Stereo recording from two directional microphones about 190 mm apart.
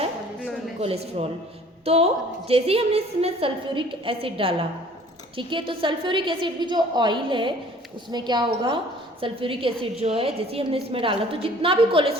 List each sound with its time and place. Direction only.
0.8 s a woman's voice: 30° right (ahead or behind)